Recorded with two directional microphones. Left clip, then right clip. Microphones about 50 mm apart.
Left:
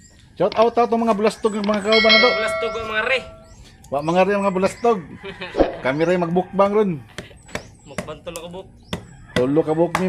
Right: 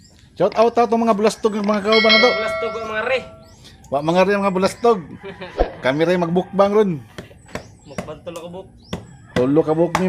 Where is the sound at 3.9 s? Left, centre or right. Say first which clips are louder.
Right 1 dB; right.